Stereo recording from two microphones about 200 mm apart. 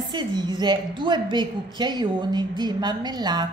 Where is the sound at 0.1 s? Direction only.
20° right (ahead or behind).